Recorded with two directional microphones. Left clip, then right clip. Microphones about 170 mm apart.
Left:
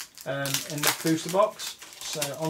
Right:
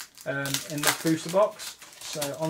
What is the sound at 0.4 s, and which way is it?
Speech, centre (ahead or behind).